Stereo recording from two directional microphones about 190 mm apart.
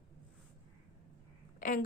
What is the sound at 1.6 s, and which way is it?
Speech, 45° left (ahead or behind).